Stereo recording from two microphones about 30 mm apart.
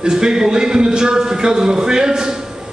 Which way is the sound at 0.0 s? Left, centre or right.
Right.